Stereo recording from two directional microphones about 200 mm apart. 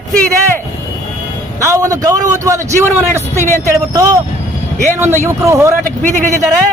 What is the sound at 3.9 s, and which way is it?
Speech, 15° right (ahead or behind).